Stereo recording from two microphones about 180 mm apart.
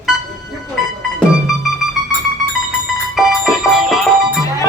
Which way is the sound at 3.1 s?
Centre (ahead or behind).